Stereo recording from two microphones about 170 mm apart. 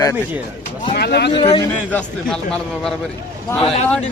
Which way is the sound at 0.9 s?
70° left (ahead or behind).